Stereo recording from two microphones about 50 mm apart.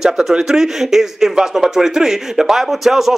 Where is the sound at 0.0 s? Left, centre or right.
Centre.